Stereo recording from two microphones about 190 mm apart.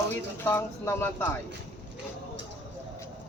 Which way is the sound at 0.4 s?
10° left (ahead or behind).